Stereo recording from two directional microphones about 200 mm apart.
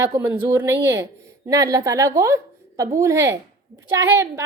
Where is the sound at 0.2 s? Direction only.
10° right (ahead or behind).